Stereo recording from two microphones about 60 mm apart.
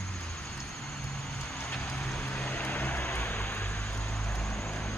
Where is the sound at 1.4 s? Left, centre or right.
Centre.